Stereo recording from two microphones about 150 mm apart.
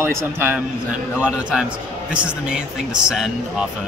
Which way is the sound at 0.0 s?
15° right (ahead or behind).